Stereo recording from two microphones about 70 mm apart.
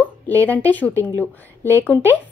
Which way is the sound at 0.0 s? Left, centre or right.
Left.